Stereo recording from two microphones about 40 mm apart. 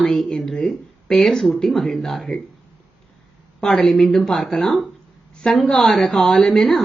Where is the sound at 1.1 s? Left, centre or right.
Centre.